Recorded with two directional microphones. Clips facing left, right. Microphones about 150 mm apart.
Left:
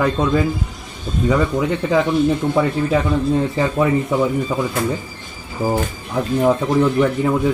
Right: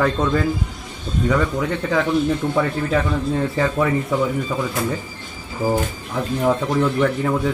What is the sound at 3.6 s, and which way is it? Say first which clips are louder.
Speech: left 2 dB; 20° left (ahead or behind).